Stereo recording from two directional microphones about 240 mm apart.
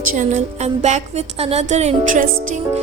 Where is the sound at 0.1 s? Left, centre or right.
Right.